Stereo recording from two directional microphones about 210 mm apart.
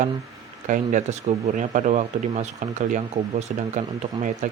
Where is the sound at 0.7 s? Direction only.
35° right (ahead or behind).